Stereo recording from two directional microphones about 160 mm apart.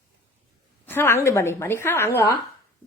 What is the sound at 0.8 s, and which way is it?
A woman's voice, 15° left (ahead or behind).